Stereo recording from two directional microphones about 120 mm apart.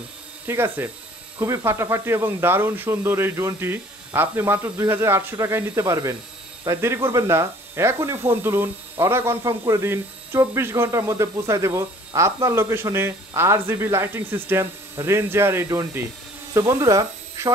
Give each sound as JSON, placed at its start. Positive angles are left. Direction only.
{"t": 0.5, "sound": "speech", "side_deg": -20}